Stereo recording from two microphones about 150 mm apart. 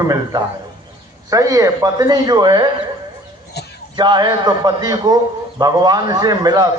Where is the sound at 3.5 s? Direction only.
90° left.